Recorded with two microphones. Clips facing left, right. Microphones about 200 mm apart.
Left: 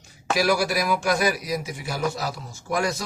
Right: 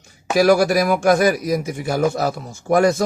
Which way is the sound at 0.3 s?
50° right (ahead or behind).